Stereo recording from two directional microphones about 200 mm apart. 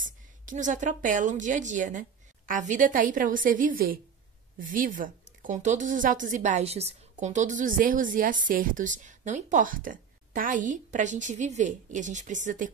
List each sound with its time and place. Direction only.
0.0 s a woman's voice: 40° right (ahead or behind)